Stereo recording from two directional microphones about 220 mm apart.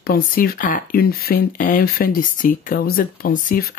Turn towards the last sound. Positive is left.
turn(degrees=40)  # may be behind; listen again after turning